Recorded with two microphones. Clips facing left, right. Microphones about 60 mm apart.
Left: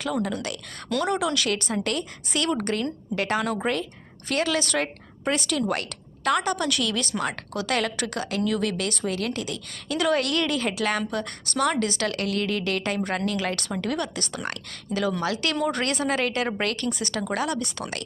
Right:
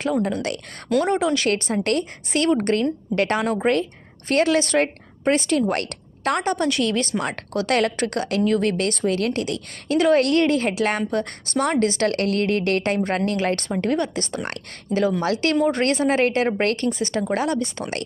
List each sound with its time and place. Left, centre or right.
0.1 s a woman's voice: right
1.0 s a woman's voice: right
3.4 s a woman's voice: right
10.0 s a woman's voice: right